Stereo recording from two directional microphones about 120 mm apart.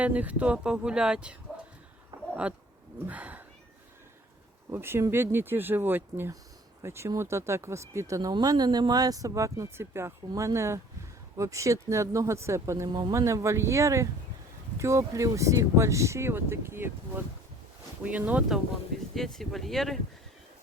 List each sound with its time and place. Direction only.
0.0 s speech: 10° right (ahead or behind)
4.7 s speech: 20° right (ahead or behind); by 20.0 s centre (ahead or behind)